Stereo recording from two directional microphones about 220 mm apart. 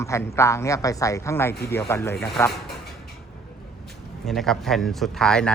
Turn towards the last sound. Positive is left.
turn(degrees=5)  # may be behind; listen again after turning